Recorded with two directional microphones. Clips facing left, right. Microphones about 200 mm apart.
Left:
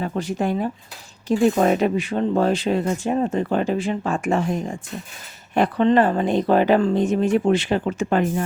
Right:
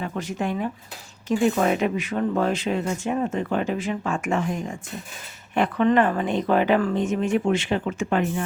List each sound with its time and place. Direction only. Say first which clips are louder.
0.0 s speech: left 4 dB; 35° left (ahead or behind)